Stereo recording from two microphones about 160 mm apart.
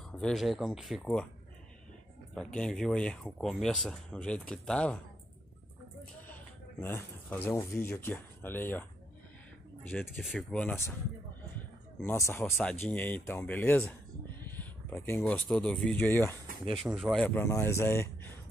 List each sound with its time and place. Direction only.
0.2 s speech: centre (ahead or behind)
2.3 s speech: 5° left (ahead or behind)
6.2 s speech: 15° left (ahead or behind)
9.8 s speech: centre (ahead or behind)
12.0 s speech: 15° left (ahead or behind)
16.8 s speech: centre (ahead or behind)